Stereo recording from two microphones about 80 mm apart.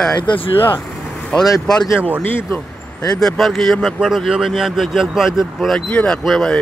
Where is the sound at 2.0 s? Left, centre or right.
Right.